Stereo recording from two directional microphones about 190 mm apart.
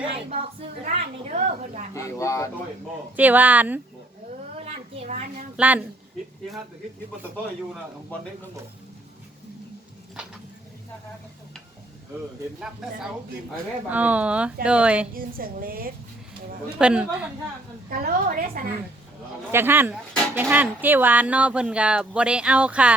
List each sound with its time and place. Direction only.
0.9 s a sound: 40° right (ahead or behind)
1.9 s speech: 15° left (ahead or behind)
3.2 s speech: 10° right (ahead or behind)
4.5 s a sound: 30° right (ahead or behind)
5.5 s speech: 10° right (ahead or behind)
12.5 s speech: 5° right (ahead or behind)
15.1 s a woman's voice: 50° right (ahead or behind)
16.7 s speech: 5° right (ahead or behind)
17.8 s a woman's voice: 45° right (ahead or behind)
19.5 s speech: 10° right (ahead or behind)